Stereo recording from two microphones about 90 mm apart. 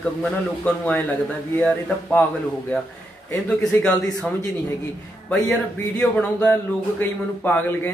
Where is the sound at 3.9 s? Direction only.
45° left (ahead or behind).